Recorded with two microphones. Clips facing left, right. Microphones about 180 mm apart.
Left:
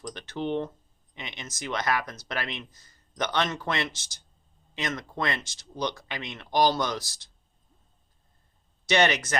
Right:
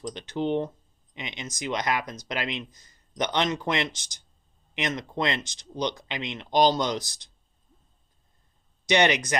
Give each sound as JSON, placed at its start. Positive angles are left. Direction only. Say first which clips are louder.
{"t": 0.0, "sound": "speech", "louder": "right 3 dB", "side_deg": -15}
{"t": 8.9, "sound": "speech", "louder": "right 1 dB", "side_deg": -15}